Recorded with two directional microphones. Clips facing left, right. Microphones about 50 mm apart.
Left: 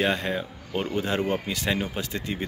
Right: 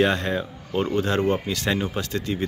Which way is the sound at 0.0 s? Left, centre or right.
Centre.